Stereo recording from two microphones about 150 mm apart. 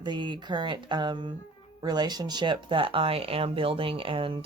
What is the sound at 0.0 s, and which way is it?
Speech, 30° right (ahead or behind).